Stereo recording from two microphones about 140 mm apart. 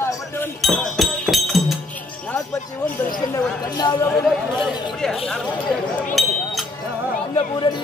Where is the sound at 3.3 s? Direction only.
25° left (ahead or behind).